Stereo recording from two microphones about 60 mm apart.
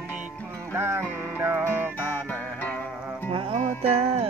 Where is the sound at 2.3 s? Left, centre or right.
Left.